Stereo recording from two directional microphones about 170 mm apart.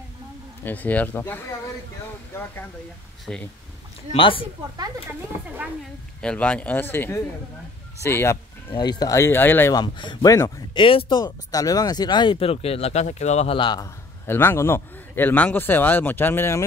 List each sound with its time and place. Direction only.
0.7 s speech: 10° left (ahead or behind)
3.3 s speech: 5° left (ahead or behind)
4.1 s speech: 30° left (ahead or behind)
6.2 s speech: 5° left (ahead or behind)
9.8 s speech: 25° left (ahead or behind)
10.8 s speech: 30° left (ahead or behind)
13.6 s speech: 25° left (ahead or behind)
14.2 s speech: 15° left (ahead or behind)